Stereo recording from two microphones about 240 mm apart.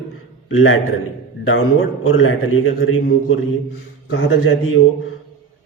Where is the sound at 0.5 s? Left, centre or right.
Left.